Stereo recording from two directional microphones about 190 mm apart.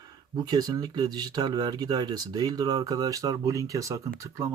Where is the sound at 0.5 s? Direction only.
20° right (ahead or behind).